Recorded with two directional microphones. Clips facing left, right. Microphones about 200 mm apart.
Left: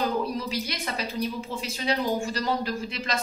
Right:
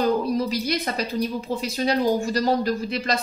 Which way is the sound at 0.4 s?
40° right (ahead or behind).